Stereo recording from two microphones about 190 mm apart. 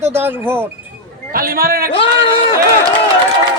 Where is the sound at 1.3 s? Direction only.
50° right (ahead or behind).